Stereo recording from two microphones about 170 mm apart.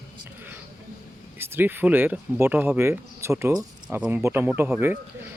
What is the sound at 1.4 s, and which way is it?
Speech, 10° right (ahead or behind).